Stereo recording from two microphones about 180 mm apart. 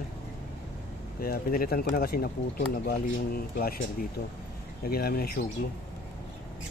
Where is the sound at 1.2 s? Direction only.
55° left (ahead or behind).